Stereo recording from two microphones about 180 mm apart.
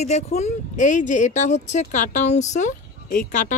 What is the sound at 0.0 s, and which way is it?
Speech, 40° left (ahead or behind).